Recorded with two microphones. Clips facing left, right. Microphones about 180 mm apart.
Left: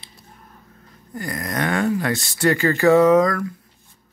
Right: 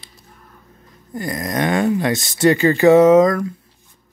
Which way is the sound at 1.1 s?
20° right (ahead or behind).